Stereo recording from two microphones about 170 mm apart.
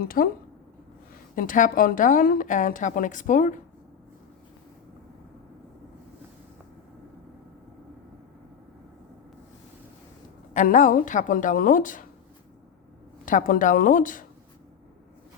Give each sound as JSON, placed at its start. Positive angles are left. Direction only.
{"t": 0.0, "sound": "a woman's voice", "side_deg": 60}
{"t": 1.4, "sound": "a woman's voice", "side_deg": 50}
{"t": 10.5, "sound": "a woman's voice", "side_deg": 50}
{"t": 13.2, "sound": "a woman's voice", "side_deg": 55}